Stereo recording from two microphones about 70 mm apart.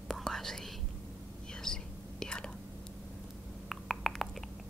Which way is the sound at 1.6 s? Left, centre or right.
Centre.